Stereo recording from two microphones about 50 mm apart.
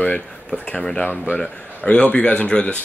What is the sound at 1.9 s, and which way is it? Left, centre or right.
Speech, left.